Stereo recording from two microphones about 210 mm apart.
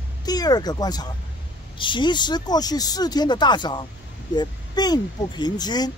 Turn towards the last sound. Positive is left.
turn(degrees=20)  # may be behind; listen again after turning